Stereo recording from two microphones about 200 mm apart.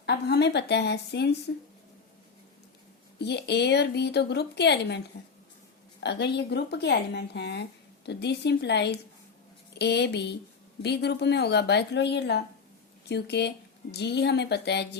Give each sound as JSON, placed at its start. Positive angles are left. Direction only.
{"t": 0.0, "sound": "speech", "side_deg": 55}
{"t": 3.2, "sound": "speech", "side_deg": 55}
{"t": 6.0, "sound": "speech", "side_deg": 60}